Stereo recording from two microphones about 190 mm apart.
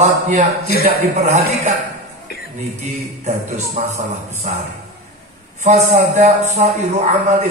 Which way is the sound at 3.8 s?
35° right (ahead or behind).